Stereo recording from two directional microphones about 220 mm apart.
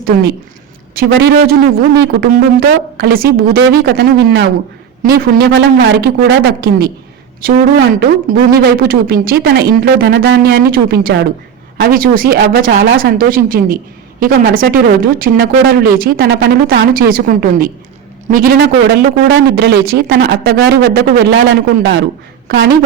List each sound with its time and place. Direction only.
0.1 s a man's voice: 40° right (ahead or behind)
18.6 s a man's voice: 50° right (ahead or behind)
22.4 s a woman's voice: 55° right (ahead or behind)